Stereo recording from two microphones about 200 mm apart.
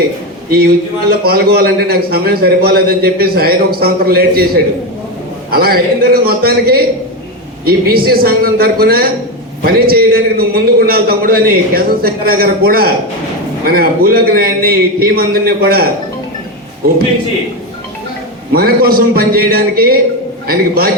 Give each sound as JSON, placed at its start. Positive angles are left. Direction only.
{"t": 1.2, "sound": "a man's voice", "side_deg": -50}
{"t": 18.5, "sound": "a man's voice", "side_deg": -50}